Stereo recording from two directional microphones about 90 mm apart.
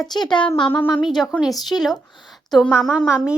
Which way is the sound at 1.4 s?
Centre (ahead or behind).